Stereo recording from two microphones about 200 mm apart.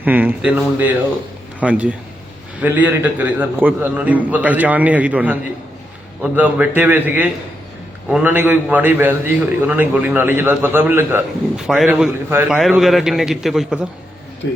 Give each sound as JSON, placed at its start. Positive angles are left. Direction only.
{"t": 0.0, "sound": "a man's voice", "side_deg": -10}
{"t": 14.4, "sound": "speech", "side_deg": 65}